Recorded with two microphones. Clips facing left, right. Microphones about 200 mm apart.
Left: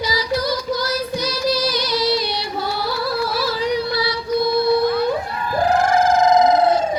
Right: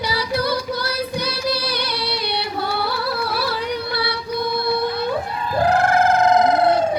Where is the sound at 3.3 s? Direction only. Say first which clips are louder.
Left 3 dB; 60° right (ahead or behind).